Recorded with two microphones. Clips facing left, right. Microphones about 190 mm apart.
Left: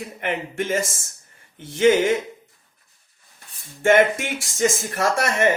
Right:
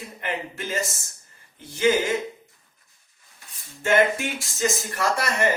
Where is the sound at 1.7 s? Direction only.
75° left (ahead or behind).